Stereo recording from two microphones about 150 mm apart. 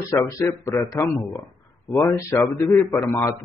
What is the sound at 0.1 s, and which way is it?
A man's voice, 20° left (ahead or behind).